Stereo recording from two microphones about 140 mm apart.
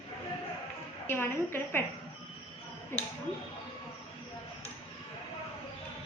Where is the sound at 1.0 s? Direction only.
15° left (ahead or behind).